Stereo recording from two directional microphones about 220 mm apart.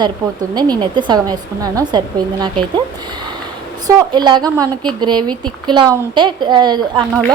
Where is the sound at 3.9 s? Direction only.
15° right (ahead or behind).